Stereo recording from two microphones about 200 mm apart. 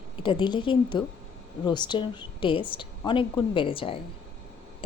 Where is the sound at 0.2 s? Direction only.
25° left (ahead or behind).